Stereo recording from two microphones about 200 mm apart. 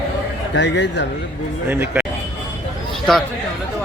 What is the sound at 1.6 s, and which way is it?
Speech, 10° right (ahead or behind).